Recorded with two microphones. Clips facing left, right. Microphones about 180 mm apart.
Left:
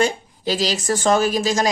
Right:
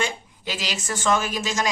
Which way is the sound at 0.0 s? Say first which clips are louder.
Left 8 dB; 35° left (ahead or behind).